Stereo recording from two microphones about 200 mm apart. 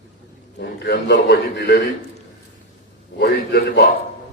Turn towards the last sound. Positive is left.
turn(degrees=55)  # may be behind; listen again after turning